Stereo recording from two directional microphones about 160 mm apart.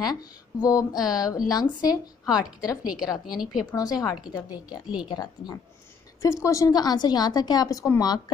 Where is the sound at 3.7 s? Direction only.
25° left (ahead or behind).